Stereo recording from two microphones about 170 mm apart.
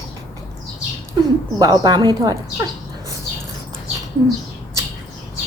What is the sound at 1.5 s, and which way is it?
Speech, 25° right (ahead or behind).